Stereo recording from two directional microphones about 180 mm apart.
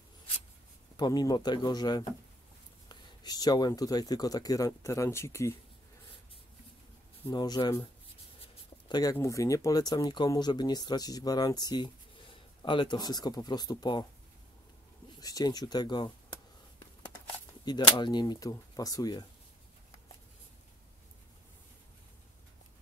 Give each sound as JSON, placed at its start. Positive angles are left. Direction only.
{"t": 0.9, "sound": "speech", "side_deg": 25}
{"t": 7.2, "sound": "speech", "side_deg": 25}
{"t": 15.0, "sound": "speech", "side_deg": 20}
{"t": 17.6, "sound": "speech", "side_deg": 25}